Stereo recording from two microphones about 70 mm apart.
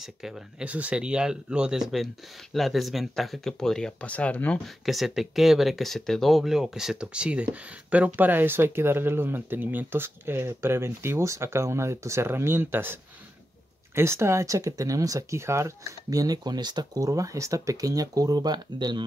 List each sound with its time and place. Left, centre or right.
0.0 s speech: centre
0.7 s speech: centre
4.0 s speech: centre
4.6 s speech: centre; by 17.0 s right
17.0 s speech: right